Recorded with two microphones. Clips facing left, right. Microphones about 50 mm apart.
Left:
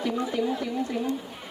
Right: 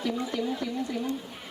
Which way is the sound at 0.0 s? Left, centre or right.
Centre.